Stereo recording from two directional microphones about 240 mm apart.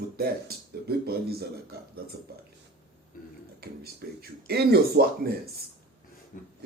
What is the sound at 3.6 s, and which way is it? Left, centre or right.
Speech, right.